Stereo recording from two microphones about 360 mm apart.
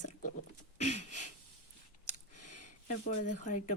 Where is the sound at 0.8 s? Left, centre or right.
Centre.